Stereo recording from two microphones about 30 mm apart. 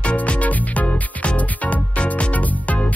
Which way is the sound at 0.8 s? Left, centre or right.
Left.